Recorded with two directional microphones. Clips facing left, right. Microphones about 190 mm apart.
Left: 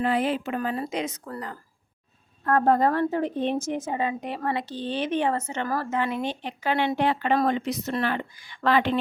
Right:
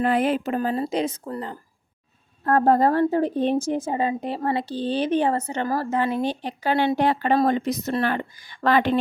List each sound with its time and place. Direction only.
0.0 s a woman's voice: 50° right (ahead or behind)